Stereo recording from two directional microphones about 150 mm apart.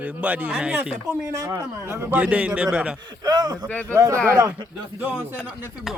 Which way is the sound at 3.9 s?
20° right (ahead or behind).